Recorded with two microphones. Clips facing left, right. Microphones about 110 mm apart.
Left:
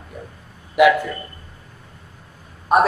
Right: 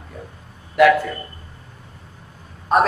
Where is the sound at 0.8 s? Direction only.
15° left (ahead or behind).